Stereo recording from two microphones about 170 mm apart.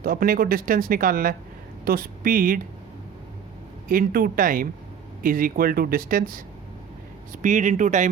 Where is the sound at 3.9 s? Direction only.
55° right (ahead or behind).